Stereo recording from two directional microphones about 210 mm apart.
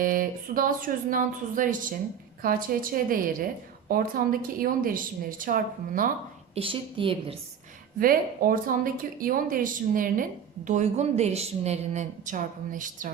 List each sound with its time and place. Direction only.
0.0 s a woman's voice: 40° right (ahead or behind)
6.5 s a woman's voice: 25° right (ahead or behind)
7.9 s a woman's voice: 40° right (ahead or behind)